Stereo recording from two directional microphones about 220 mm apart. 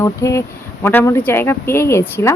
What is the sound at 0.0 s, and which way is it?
Speech, 15° left (ahead or behind).